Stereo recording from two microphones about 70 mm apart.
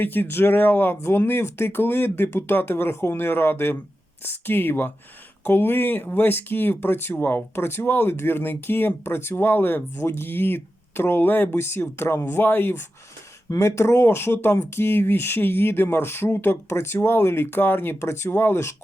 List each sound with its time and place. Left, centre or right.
0.0 s speech: left
13.6 s speech: left